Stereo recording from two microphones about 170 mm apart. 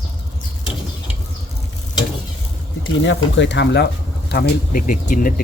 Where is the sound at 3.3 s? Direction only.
90° left.